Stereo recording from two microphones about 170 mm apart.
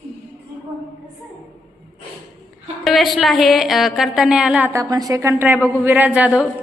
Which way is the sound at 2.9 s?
Centre (ahead or behind).